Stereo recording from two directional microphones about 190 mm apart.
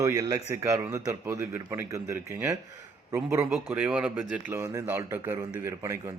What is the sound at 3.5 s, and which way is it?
Speech, 5° right (ahead or behind).